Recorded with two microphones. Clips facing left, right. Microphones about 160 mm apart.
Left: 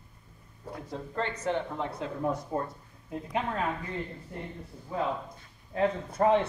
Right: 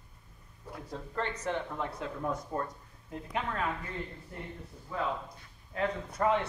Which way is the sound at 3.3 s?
25° left (ahead or behind).